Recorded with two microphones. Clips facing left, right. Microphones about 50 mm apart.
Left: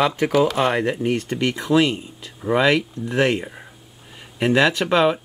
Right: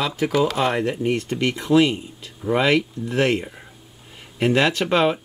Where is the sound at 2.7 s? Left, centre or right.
Centre.